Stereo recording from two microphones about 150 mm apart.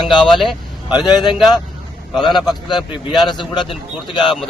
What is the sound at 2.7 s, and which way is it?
Speech, 30° left (ahead or behind).